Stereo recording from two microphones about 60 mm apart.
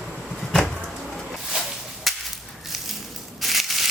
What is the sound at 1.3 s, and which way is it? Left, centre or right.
Whip, centre.